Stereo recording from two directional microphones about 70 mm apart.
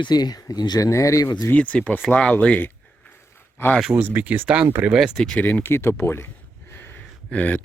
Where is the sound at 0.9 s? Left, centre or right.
Left.